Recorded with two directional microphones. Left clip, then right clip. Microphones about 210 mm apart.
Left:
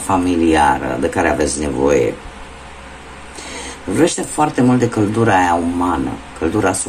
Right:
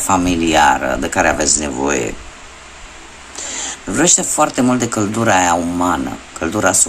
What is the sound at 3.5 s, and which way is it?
Speech, 25° right (ahead or behind).